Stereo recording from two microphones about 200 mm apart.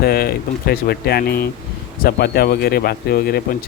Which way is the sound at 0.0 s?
50° left (ahead or behind).